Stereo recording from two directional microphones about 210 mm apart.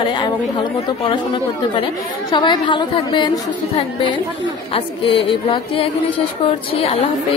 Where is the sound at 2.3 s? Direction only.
20° left (ahead or behind).